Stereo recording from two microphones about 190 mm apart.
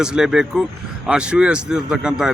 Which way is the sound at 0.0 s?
5° right (ahead or behind).